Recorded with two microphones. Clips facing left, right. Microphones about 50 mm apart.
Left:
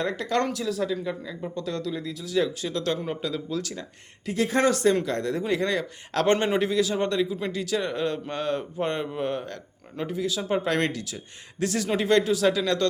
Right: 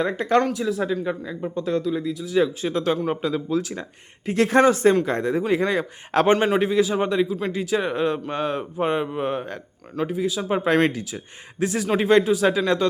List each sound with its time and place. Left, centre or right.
0.0 s speech: right
4.4 s speech: right
4.6 s speech: right
6.3 s speech: centre
7.5 s speech: centre
10.0 s speech: centre